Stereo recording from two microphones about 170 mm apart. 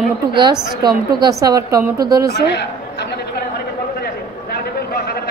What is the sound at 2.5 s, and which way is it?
Chatter, 80° left.